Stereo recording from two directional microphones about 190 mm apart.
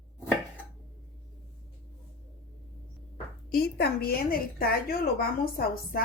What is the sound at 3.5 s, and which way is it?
A woman's voice, 55° left (ahead or behind).